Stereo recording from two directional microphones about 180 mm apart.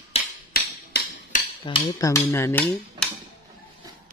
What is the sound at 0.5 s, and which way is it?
Hammer, 50° left (ahead or behind).